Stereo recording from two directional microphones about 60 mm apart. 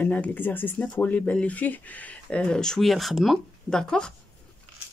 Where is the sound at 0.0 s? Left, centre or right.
Left.